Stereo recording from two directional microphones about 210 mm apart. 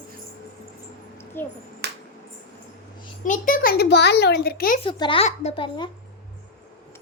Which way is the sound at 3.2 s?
40° left (ahead or behind).